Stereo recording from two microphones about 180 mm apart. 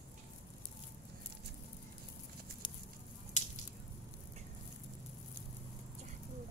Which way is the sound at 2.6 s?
25° left (ahead or behind).